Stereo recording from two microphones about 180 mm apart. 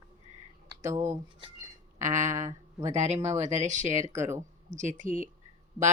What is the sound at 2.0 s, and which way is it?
Speech, 40° right (ahead or behind).